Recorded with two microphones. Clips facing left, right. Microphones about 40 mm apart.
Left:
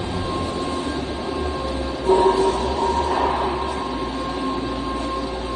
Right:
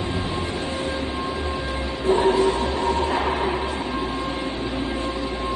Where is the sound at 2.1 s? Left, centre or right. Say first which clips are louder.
Left 2 dB; right.